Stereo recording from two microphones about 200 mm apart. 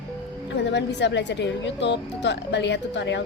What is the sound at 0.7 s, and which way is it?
A woman's voice, 60° left (ahead or behind).